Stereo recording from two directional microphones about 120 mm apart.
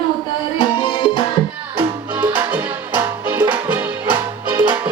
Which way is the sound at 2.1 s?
15° right (ahead or behind).